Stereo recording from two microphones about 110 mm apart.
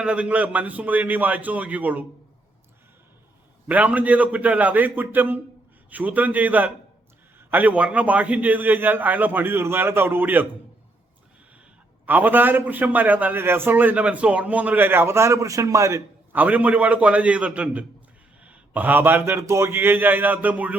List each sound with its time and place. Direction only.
0.0 s a man's voice: 10° right (ahead or behind)
3.7 s a man's voice: 15° right (ahead or behind)
12.0 s a man's voice: 15° right (ahead or behind)
16.3 s a man's voice: 15° right (ahead or behind)